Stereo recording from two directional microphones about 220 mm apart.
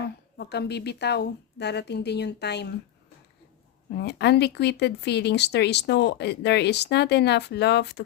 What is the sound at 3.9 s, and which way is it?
Speech, 50° left (ahead or behind).